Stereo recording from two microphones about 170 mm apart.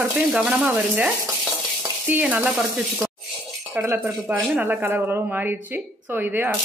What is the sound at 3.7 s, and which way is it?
Speech, 10° right (ahead or behind).